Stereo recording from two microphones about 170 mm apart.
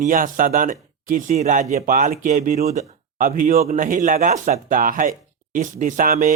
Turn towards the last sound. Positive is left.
turn(degrees=-50)  # may be behind; listen again after turning